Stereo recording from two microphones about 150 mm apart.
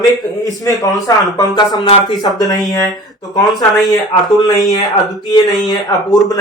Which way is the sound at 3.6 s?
25° left (ahead or behind).